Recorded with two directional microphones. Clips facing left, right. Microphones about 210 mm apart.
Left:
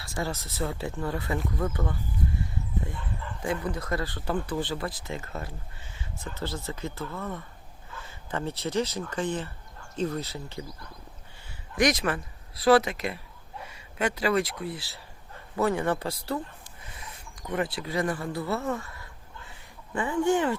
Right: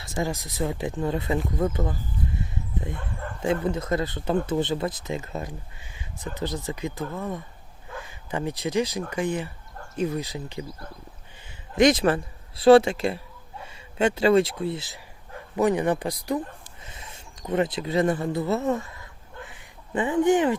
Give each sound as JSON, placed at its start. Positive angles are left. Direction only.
{"t": 0.0, "sound": "speech", "side_deg": -20}
{"t": 2.9, "sound": "bow-wow", "side_deg": -45}
{"t": 3.4, "sound": "speech", "side_deg": -25}
{"t": 11.7, "sound": "speech", "side_deg": -25}
{"t": 19.5, "sound": "a sound", "side_deg": -20}